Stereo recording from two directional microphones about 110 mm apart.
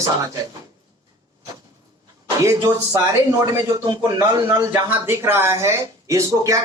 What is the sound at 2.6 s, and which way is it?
A man's voice, 30° right (ahead or behind).